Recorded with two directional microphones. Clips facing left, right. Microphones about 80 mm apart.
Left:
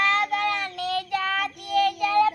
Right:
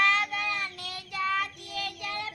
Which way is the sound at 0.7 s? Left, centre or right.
Left.